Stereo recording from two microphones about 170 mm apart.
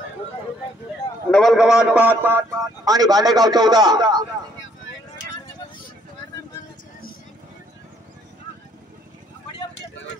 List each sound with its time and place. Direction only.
1.3 s a man's voice: centre (ahead or behind); by 4.3 s 25° right (ahead or behind)